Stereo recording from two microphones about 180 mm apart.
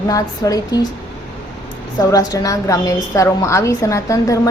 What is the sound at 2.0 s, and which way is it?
A woman's voice, 20° left (ahead or behind).